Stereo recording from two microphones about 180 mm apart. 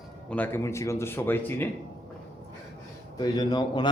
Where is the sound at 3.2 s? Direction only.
20° left (ahead or behind).